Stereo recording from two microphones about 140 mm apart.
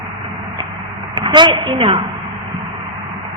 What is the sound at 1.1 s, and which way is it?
Speech, 35° right (ahead or behind).